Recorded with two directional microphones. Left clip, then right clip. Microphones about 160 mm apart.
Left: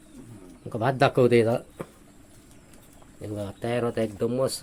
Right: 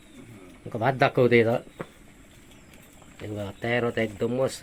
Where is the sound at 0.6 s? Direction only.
15° left (ahead or behind).